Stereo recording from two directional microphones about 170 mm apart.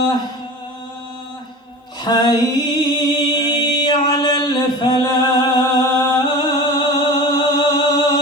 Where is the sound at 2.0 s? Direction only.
25° left (ahead or behind).